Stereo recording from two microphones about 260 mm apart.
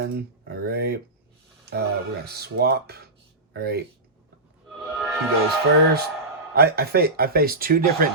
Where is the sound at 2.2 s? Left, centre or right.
Right.